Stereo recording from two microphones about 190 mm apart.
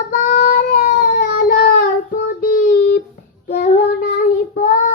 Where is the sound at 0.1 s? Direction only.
45° left (ahead or behind).